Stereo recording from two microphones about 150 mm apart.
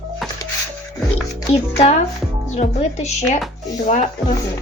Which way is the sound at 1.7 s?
45° left (ahead or behind).